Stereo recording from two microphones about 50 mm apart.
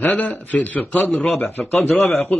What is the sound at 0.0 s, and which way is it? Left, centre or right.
Speech, left.